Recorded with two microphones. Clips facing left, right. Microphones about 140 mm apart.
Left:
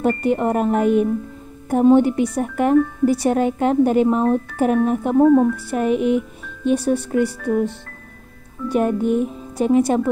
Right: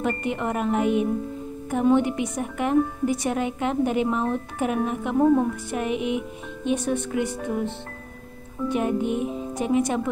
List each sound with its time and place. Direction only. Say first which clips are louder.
0.0 s speech: left 7 dB; 40° left (ahead or behind)